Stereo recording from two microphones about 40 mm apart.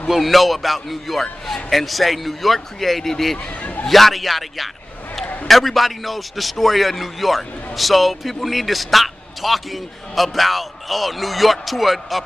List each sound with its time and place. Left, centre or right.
0.1 s a man's voice: centre
5.2 s a sound: left
5.5 s a man's voice: centre